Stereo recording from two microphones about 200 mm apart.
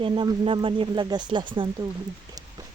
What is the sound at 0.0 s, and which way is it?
Speech, 25° right (ahead or behind).